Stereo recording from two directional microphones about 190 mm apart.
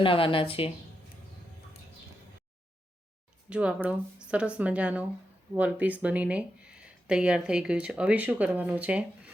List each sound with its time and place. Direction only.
0.0 s speech: 30° left (ahead or behind)
3.5 s speech: 5° right (ahead or behind)